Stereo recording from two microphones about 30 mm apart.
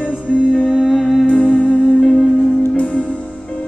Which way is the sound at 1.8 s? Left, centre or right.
Left.